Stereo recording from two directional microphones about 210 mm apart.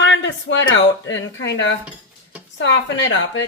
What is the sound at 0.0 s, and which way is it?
Speech, 60° left (ahead or behind).